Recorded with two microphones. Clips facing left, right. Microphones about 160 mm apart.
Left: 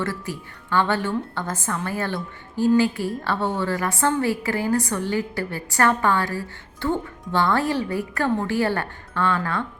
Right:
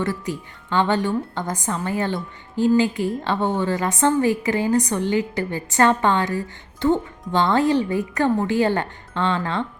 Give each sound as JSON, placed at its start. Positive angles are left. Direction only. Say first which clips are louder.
{"t": 0.0, "sound": "a woman's voice", "louder": "right 3 dB", "side_deg": -20}